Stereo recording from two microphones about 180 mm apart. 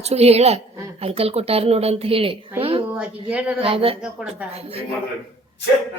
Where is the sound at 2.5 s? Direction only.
30° right (ahead or behind).